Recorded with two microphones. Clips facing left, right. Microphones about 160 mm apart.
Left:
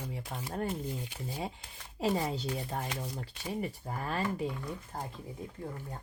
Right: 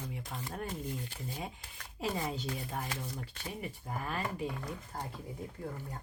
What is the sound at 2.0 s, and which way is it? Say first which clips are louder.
Speech: left 5 dB; 35° left (ahead or behind).